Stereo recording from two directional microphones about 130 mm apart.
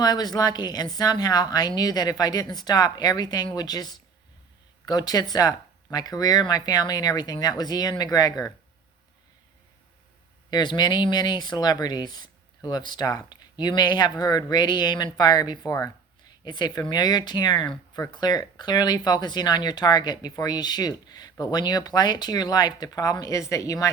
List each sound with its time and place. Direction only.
0.0 s speech: 30° left (ahead or behind)
10.5 s speech: 35° left (ahead or behind)